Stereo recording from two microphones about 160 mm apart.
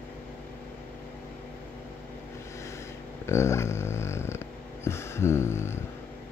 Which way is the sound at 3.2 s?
15° left (ahead or behind).